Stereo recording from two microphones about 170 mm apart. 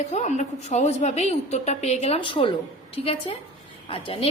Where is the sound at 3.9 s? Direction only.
30° left (ahead or behind).